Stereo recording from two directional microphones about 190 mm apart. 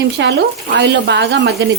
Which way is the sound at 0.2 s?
65° right (ahead or behind).